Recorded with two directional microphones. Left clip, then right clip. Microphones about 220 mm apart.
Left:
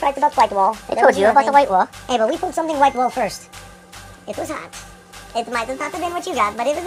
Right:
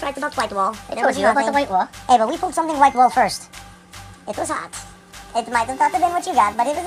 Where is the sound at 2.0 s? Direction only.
5° right (ahead or behind).